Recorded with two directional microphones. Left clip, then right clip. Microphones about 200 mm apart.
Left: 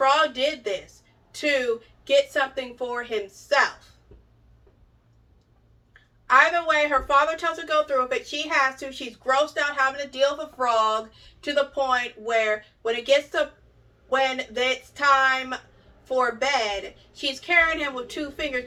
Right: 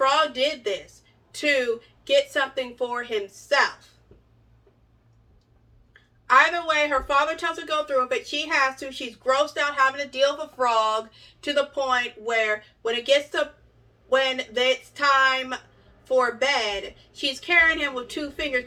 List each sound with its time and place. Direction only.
0.0 s a woman's voice: 15° right (ahead or behind)
6.2 s speech: 15° right (ahead or behind)